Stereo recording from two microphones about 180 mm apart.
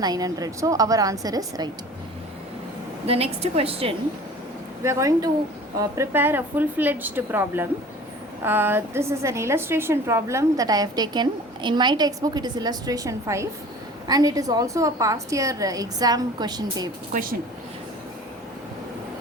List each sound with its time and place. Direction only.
0.0 s a woman's voice: 20° right (ahead or behind)
3.1 s a woman's voice: 35° right (ahead or behind)
4.8 s a woman's voice: 15° right (ahead or behind)